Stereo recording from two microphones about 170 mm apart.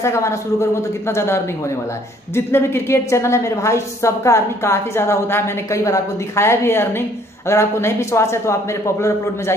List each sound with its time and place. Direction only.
0.0 s a woman's voice: 15° left (ahead or behind)